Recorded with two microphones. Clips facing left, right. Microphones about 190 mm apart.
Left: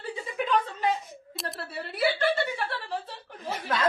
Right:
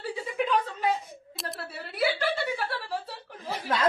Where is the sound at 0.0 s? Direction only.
5° right (ahead or behind).